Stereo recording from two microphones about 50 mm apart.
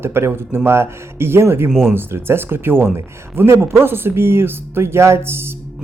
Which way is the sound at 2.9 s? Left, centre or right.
Right.